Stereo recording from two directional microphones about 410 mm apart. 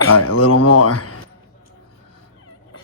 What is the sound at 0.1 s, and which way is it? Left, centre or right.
Speech, left.